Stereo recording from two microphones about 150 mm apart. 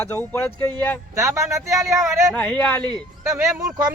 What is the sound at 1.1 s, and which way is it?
Speech, 20° right (ahead or behind).